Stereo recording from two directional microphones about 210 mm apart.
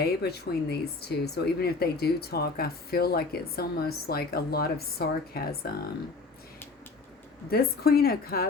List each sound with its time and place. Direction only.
0.0 s speech: 50° left (ahead or behind)
7.5 s speech: 45° left (ahead or behind)